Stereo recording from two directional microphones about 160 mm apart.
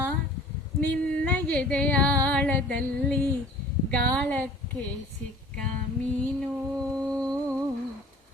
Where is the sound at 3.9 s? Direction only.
5° left (ahead or behind).